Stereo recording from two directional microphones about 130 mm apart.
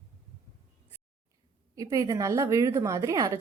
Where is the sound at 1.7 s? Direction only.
25° right (ahead or behind).